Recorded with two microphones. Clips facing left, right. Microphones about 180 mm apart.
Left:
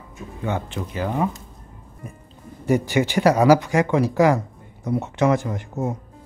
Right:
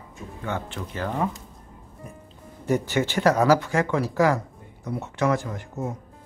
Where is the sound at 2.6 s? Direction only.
10° left (ahead or behind).